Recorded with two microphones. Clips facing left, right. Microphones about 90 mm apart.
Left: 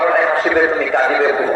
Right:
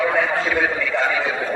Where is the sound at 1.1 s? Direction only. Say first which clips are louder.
Left 8 dB; 35° left (ahead or behind).